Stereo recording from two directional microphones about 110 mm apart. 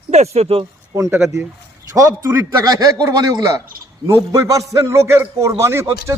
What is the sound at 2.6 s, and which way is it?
A man's voice, 35° right (ahead or behind).